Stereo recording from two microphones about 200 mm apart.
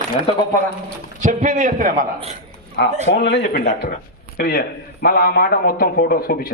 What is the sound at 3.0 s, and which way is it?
A man's voice, 60° left (ahead or behind).